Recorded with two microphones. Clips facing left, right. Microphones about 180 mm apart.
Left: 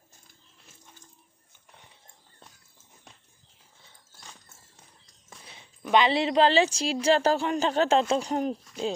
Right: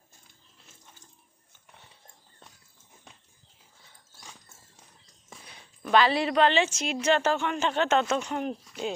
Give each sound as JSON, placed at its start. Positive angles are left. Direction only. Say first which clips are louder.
{"t": 5.8, "sound": "a woman's voice", "louder": "even", "side_deg": 20}